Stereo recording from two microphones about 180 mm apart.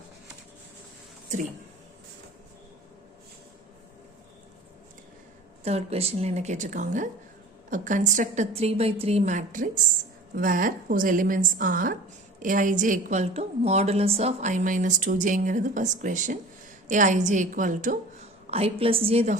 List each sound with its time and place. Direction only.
1.3 s a woman's voice: 45° right (ahead or behind)
5.6 s a woman's voice: 35° right (ahead or behind)
18.5 s a woman's voice: 35° right (ahead or behind)